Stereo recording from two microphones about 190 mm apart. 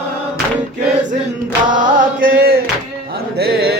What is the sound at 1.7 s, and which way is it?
Chant, 50° right (ahead or behind).